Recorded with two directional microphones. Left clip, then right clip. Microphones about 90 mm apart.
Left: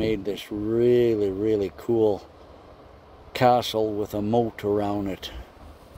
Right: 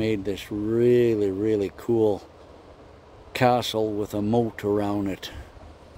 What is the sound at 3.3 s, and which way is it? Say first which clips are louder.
Speech: left 2 dB; 40° right (ahead or behind).